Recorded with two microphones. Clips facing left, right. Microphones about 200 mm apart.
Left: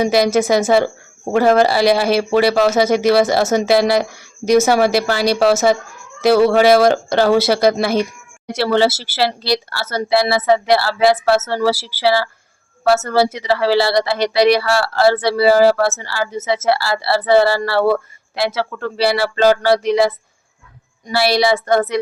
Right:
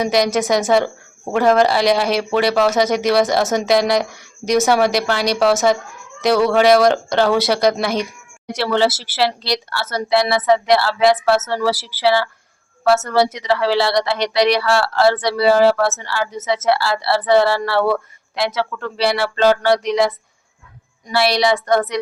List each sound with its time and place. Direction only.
0.0 s speech: 5° left (ahead or behind)
21.2 s speech: 5° left (ahead or behind)